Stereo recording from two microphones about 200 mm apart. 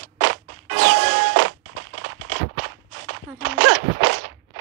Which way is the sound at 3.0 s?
90° right.